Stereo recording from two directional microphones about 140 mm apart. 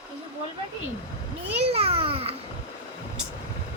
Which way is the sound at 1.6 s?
45° right (ahead or behind).